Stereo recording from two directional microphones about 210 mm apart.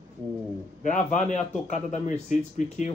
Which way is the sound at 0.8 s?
35° left (ahead or behind).